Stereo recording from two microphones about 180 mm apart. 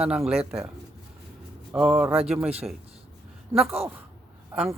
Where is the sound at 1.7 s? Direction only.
5° right (ahead or behind).